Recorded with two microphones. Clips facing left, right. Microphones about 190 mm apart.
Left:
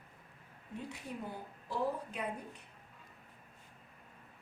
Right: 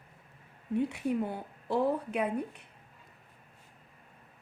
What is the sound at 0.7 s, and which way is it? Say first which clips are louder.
A woman's voice: right 14 dB; 65° right (ahead or behind).